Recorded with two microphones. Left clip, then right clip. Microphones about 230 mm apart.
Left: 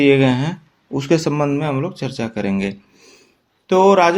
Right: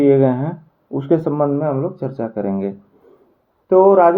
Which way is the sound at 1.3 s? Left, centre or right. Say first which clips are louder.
Right 2 dB; left.